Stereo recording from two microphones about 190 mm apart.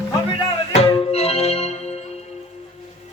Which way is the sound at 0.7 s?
30° left (ahead or behind).